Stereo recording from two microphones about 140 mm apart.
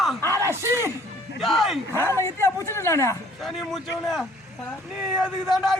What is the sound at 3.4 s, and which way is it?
A man's voice, centre (ahead or behind).